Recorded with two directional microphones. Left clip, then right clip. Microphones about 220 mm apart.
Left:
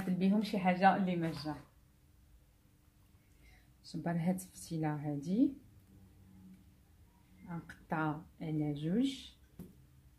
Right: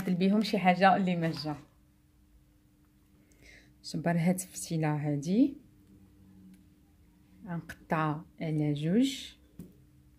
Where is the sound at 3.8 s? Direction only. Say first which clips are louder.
Right 8 dB; 40° right (ahead or behind).